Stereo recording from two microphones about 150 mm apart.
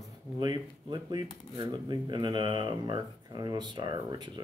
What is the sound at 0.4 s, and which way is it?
Speech, 30° right (ahead or behind).